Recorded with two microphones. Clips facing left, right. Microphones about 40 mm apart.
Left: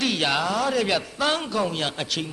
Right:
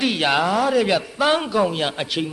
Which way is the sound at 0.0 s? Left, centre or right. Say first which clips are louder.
Right 4 dB; centre.